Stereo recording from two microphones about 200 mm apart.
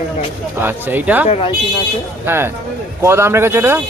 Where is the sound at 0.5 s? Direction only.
10° right (ahead or behind).